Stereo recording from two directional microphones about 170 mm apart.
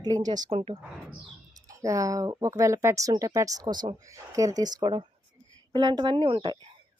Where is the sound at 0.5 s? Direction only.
35° right (ahead or behind).